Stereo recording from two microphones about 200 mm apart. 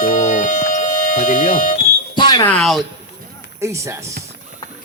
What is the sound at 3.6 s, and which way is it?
Speech, 15° right (ahead or behind).